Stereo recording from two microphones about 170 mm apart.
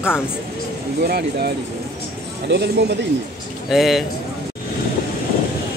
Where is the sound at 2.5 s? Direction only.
80° right.